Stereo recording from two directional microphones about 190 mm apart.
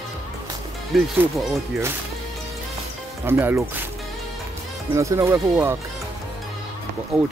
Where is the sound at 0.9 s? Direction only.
Centre (ahead or behind).